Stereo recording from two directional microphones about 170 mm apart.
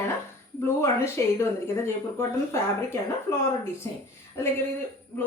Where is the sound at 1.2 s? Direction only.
15° left (ahead or behind).